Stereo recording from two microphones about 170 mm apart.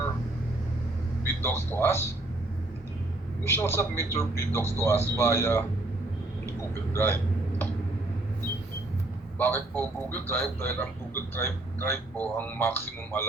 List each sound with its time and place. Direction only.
1.2 s a man's voice: 15° left (ahead or behind)
3.4 s a man's voice: 15° left (ahead or behind)
6.9 s a man's voice: 15° left (ahead or behind)
9.4 s a man's voice: 10° left (ahead or behind)